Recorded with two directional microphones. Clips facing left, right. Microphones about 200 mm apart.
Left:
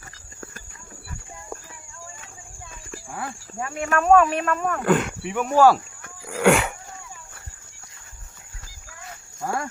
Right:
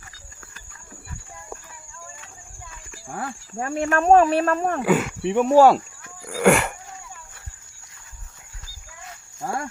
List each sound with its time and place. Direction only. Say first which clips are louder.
3.2 s speech: right 2 dB; 40° right (ahead or behind)
4.8 s speech: left 3 dB; 5° right (ahead or behind)
5.2 s speech: right 4 dB; 30° right (ahead or behind)
6.2 s a sound: right 1 dB; centre (ahead or behind)